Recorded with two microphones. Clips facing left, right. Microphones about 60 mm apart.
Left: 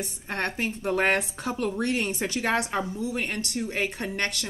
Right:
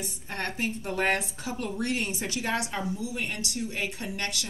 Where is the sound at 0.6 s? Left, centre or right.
Left.